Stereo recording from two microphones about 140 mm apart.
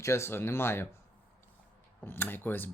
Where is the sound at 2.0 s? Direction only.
15° left (ahead or behind).